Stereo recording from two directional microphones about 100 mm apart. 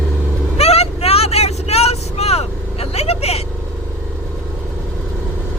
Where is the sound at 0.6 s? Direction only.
90° left.